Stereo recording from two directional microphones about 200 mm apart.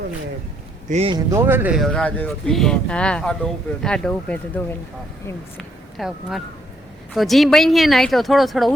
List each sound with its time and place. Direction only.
0.9 s speech: 35° right (ahead or behind)
1.1 s speech: 15° right (ahead or behind); by 4.6 s 5° left (ahead or behind)
6.0 s speech: centre (ahead or behind)